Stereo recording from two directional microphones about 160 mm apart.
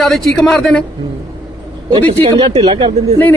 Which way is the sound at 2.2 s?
35° right (ahead or behind).